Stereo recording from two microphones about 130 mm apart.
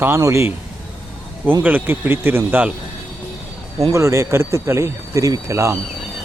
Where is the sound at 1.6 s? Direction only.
15° right (ahead or behind).